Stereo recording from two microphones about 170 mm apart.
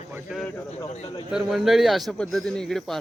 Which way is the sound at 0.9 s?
40° left (ahead or behind).